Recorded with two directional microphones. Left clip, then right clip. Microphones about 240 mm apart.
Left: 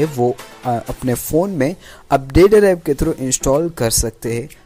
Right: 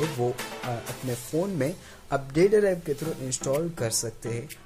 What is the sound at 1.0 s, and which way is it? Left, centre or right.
Speech, left.